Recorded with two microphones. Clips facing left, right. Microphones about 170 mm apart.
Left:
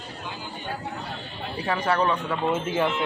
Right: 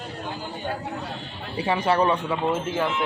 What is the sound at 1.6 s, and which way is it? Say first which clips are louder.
Speech: right 3 dB; 25° right (ahead or behind).